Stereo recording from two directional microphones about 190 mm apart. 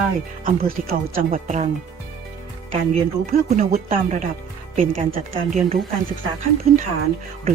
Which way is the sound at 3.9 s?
40° right (ahead or behind).